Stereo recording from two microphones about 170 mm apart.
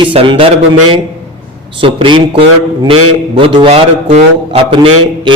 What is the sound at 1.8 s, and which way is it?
A man's voice, 30° right (ahead or behind).